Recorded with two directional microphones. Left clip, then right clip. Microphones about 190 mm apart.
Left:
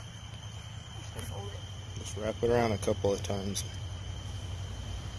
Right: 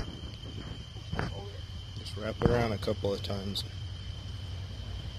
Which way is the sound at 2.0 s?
Centre (ahead or behind).